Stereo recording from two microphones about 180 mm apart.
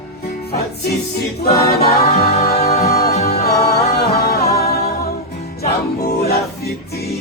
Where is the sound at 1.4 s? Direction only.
60° left (ahead or behind).